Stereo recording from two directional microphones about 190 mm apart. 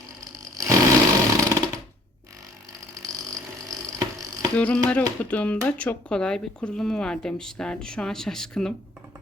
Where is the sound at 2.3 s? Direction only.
20° right (ahead or behind).